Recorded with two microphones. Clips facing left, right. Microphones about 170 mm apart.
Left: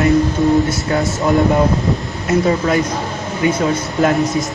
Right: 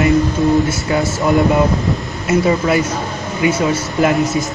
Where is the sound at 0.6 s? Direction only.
Centre (ahead or behind).